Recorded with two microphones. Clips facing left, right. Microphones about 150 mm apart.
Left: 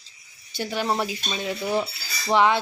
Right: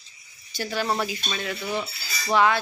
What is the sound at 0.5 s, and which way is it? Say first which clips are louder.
Speech: left 1 dB; 20° left (ahead or behind).